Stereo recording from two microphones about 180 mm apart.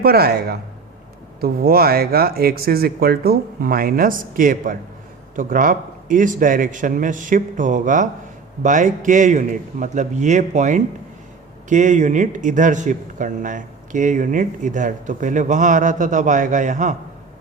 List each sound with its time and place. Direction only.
0.0 s a man's voice: 60° right (ahead or behind)